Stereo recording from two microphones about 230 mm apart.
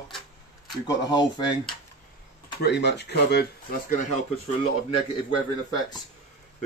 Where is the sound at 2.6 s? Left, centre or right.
Left.